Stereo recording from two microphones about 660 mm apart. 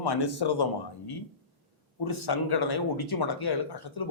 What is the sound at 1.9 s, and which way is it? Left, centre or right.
Speech, left.